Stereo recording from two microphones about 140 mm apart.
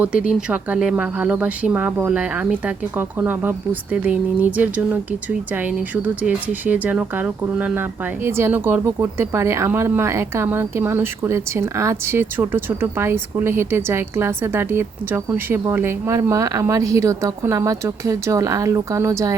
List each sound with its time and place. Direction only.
0.0 s speech: 10° right (ahead or behind)